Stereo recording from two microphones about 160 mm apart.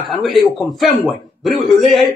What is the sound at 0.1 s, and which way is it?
A man's voice, centre (ahead or behind).